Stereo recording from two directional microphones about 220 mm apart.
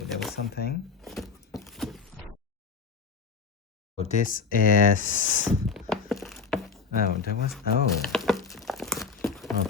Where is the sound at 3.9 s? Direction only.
35° left (ahead or behind).